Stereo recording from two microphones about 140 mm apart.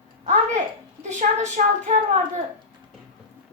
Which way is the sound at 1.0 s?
60° right (ahead or behind).